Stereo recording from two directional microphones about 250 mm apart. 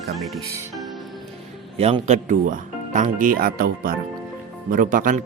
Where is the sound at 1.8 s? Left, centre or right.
Right.